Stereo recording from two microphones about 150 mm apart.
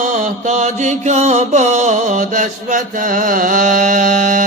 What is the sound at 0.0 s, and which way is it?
Mantra, 55° right (ahead or behind).